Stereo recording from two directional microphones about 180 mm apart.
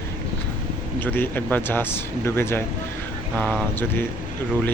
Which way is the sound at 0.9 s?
10° left (ahead or behind).